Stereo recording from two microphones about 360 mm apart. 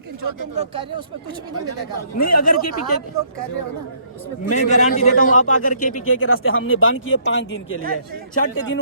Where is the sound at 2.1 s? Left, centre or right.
Left.